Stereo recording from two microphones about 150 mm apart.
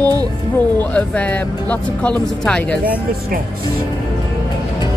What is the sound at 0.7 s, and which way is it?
Speech, 10° left (ahead or behind).